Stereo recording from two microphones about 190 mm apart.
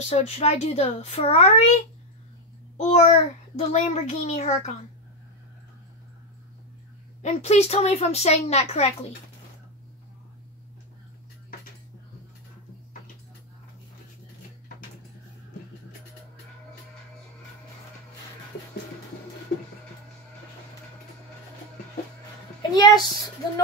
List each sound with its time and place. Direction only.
0.1 s a child's voice: 35° left (ahead or behind)
2.8 s a child's voice: 40° left (ahead or behind)
7.2 s a child's voice: 35° left (ahead or behind)
22.6 s a sound: 20° left (ahead or behind)